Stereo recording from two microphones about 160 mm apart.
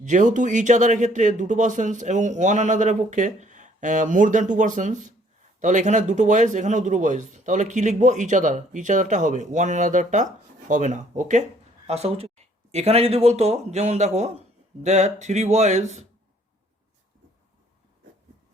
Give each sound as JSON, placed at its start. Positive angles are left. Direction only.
{"t": 0.0, "sound": "speech", "side_deg": -50}
{"t": 11.9, "sound": "speech", "side_deg": -40}